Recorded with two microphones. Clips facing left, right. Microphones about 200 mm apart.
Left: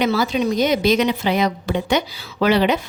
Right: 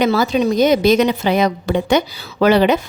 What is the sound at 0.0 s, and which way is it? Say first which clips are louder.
A woman's voice: right 4 dB; 40° right (ahead or behind).